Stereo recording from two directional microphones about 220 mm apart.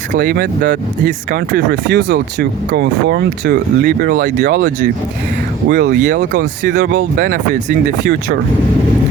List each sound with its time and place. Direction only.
0.1 s speech: 45° right (ahead or behind)
6.1 s speech: 35° right (ahead or behind)